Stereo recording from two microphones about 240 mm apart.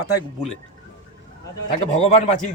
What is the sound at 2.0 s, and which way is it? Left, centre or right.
Speech, left.